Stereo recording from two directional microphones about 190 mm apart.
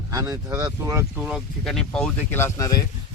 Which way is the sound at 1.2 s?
5° right (ahead or behind).